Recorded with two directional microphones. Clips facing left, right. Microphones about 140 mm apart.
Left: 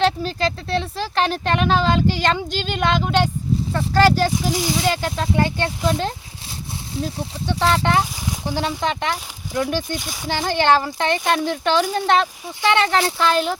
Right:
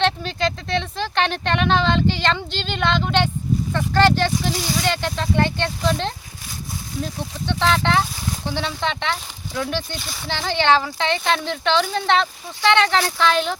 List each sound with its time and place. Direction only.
0.0 s speech: 5° left (ahead or behind)
7.4 s speech: 10° left (ahead or behind)